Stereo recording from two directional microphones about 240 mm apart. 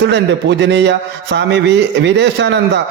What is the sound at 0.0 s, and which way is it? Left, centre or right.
A man's voice, right.